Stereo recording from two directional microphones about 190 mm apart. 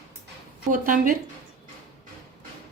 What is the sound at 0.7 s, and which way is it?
Speech, 45° right (ahead or behind).